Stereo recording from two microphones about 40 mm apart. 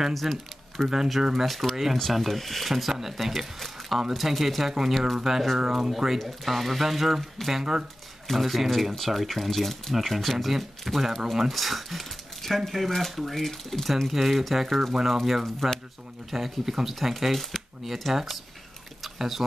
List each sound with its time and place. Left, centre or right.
0.1 s speech: centre
2.7 s speech: centre
7.5 s speech: centre
8.3 s speech: centre
14.0 s speech: centre